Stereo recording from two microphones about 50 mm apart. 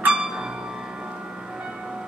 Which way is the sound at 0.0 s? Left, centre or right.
Centre.